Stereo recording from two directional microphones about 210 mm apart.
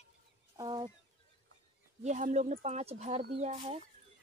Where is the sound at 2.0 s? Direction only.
35° right (ahead or behind).